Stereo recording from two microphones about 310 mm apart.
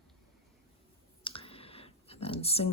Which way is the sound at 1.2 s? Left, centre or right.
Centre.